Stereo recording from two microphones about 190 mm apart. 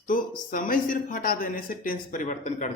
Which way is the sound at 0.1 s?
45° left (ahead or behind).